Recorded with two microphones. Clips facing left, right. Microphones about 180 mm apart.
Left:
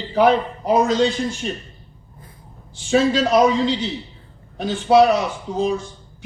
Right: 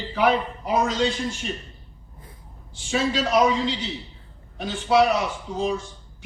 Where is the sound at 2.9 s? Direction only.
40° left (ahead or behind).